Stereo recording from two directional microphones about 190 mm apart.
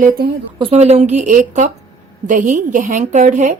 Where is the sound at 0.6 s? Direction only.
30° right (ahead or behind).